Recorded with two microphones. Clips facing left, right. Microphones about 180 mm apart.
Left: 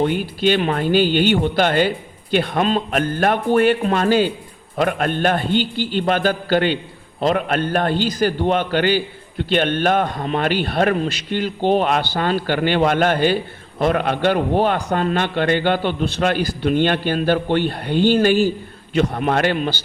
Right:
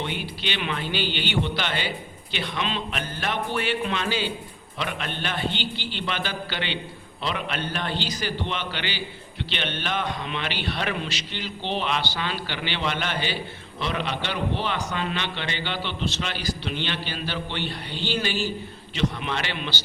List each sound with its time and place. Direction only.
0.0 s a man's voice: 45° left (ahead or behind)